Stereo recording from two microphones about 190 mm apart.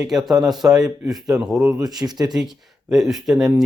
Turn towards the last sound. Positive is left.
turn(degrees=0)  # may be behind; listen again after turning